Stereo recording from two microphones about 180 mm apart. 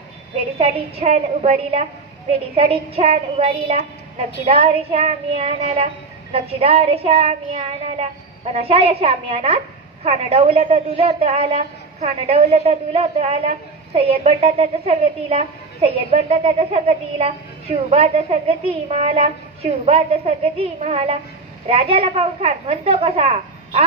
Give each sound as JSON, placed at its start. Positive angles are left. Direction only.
{"t": 0.6, "sound": "a woman's voice", "side_deg": -35}